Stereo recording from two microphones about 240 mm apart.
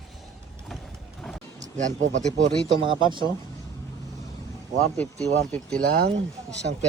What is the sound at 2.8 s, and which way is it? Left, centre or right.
Speech, centre.